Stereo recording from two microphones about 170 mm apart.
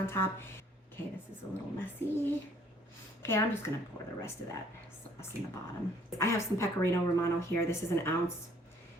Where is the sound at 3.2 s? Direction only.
15° left (ahead or behind).